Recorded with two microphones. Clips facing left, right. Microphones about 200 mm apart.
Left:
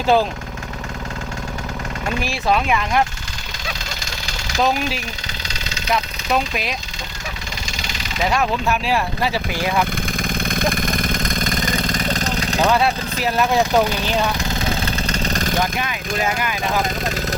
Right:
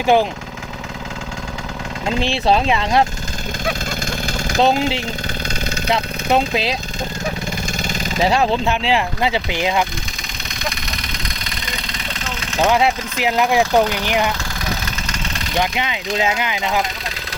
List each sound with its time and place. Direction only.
0.0 s speech: 15° right (ahead or behind)
2.0 s speech: 25° right (ahead or behind)
3.7 s vehicle: 55° right (ahead or behind)
4.6 s speech: 25° right (ahead or behind)
6.3 s speech: 30° right (ahead or behind)
8.2 s speech: 30° right (ahead or behind)
10.5 s vehicle: 50° left (ahead or behind)
12.6 s speech: 15° right (ahead or behind)
14.3 s engine: 25° left (ahead or behind)
15.7 s speech: 20° right (ahead or behind)